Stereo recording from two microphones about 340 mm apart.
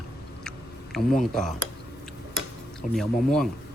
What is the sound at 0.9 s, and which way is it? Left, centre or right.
Speech, centre.